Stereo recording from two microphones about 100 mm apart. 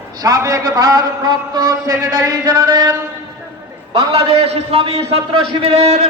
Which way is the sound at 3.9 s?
75° right (ahead or behind).